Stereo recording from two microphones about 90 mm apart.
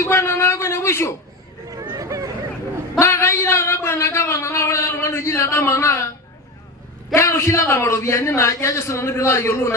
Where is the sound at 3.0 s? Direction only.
30° left (ahead or behind).